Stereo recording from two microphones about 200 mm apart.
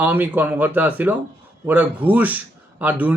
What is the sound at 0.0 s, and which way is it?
A man's voice, 10° right (ahead or behind).